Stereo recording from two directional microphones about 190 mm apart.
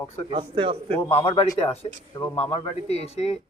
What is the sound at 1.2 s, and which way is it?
Speech, 25° left (ahead or behind).